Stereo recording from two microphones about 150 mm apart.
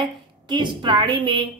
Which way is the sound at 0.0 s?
30° right (ahead or behind).